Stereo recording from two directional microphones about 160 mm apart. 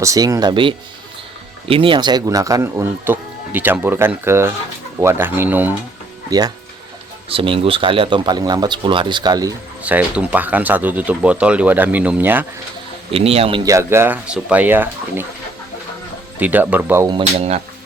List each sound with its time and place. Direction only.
0.0 s speech: 20° right (ahead or behind)
6.3 s speech: 20° right (ahead or behind)
7.3 s speech: 35° right (ahead or behind)
9.8 s speech: 10° right (ahead or behind)
13.1 s speech: 40° right (ahead or behind)
13.7 s speech: 15° right (ahead or behind)
16.4 s speech: 10° right (ahead or behind)